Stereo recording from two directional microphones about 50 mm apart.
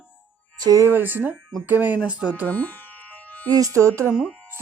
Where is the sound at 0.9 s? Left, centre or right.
Right.